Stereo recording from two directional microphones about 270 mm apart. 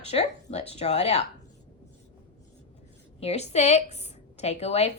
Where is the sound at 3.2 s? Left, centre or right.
Left.